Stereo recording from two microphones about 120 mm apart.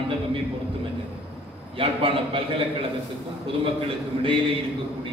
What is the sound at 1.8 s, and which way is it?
Speech, 50° right (ahead or behind).